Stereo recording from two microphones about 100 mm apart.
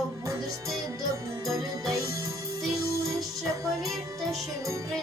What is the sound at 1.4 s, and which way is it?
Music, 35° right (ahead or behind).